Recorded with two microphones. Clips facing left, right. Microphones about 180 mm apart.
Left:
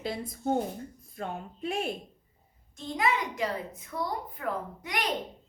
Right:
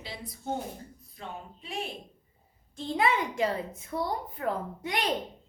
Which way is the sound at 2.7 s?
30° right (ahead or behind).